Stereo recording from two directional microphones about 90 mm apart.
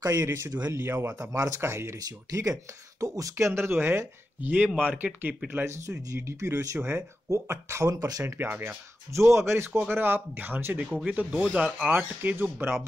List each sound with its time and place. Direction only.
0.2 s speech: 30° right (ahead or behind)
0.5 s speech: 45° right (ahead or behind)
0.7 s speech: 25° right (ahead or behind)
1.0 s speech: 40° right (ahead or behind)
2.0 s speech: 40° right (ahead or behind)
8.4 s speech: 20° right (ahead or behind)
9.1 s speech: 30° right (ahead or behind); by 11.9 s 10° right (ahead or behind)
11.9 s speech: 20° right (ahead or behind)